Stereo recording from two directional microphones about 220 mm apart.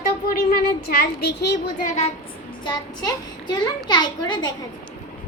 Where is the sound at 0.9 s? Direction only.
45° left (ahead or behind).